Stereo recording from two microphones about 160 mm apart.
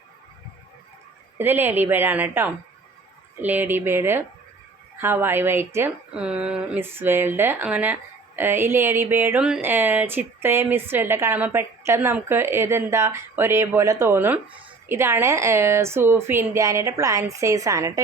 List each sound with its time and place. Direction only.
1.4 s speech: 15° right (ahead or behind)